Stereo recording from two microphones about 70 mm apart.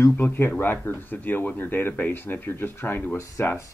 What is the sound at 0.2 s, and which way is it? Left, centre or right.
Speech, left.